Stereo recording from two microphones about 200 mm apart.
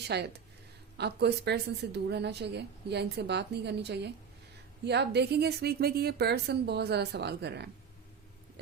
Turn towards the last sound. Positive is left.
turn(degrees=-55)  # may be behind; listen again after turning